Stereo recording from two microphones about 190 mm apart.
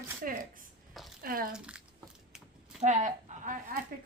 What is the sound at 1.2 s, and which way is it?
Speech, 50° right (ahead or behind).